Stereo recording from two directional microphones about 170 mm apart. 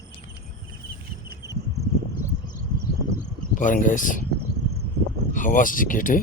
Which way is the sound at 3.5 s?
50° left (ahead or behind).